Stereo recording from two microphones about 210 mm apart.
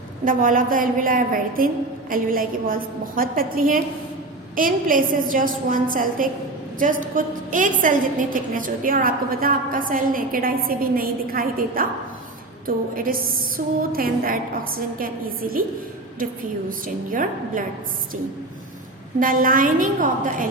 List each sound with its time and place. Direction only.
0.3 s a woman's voice: 40° right (ahead or behind)
16.6 s a woman's voice: 40° right (ahead or behind)
19.2 s a woman's voice: 40° right (ahead or behind)